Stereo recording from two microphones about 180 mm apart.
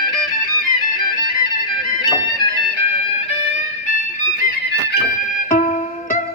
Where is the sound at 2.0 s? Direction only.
25° left (ahead or behind).